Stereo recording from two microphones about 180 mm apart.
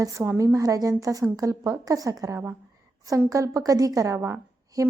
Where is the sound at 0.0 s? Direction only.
15° right (ahead or behind).